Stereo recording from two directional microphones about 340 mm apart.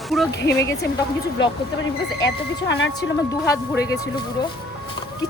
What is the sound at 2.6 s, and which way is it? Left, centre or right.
Speech, left.